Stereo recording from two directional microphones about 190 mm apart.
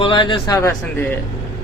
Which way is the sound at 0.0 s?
25° left (ahead or behind).